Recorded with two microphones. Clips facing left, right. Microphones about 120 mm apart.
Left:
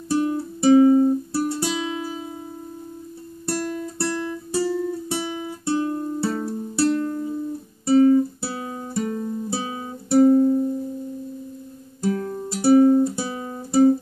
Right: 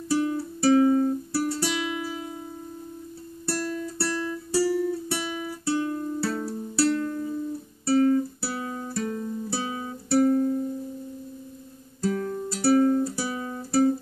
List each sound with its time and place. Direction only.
0.1 s music: 20° left (ahead or behind)
3.4 s music: 20° left (ahead or behind)
5.2 s guitar: 25° left (ahead or behind)
6.3 s music: 20° left (ahead or behind)
7.8 s guitar: 20° left (ahead or behind)
12.0 s music: 20° left (ahead or behind)